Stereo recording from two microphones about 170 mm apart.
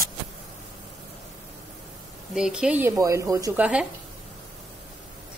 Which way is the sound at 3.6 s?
5° right (ahead or behind).